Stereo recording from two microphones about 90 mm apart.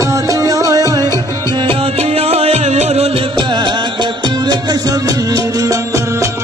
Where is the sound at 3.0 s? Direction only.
75° right (ahead or behind).